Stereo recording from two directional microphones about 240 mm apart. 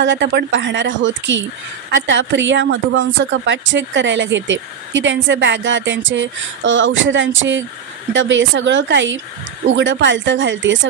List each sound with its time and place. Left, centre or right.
0.0 s speech: right